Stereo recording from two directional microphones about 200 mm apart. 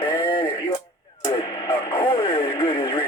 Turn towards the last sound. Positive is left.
turn(degrees=25)  # may be behind; listen again after turning